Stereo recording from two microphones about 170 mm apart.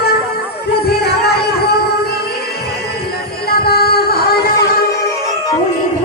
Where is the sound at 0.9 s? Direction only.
70° left (ahead or behind).